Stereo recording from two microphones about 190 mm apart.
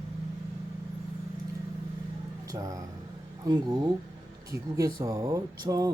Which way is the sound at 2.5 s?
20° right (ahead or behind).